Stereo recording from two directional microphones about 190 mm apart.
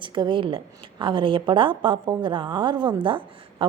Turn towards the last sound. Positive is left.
turn(degrees=-25)  # may be behind; listen again after turning